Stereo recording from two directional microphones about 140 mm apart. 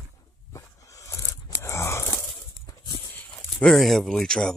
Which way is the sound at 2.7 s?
30° left (ahead or behind).